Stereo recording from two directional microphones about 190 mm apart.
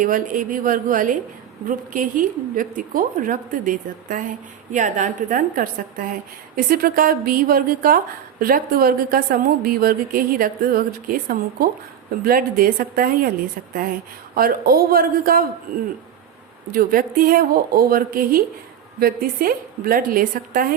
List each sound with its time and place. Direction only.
0.0 s a woman's voice: 45° right (ahead or behind)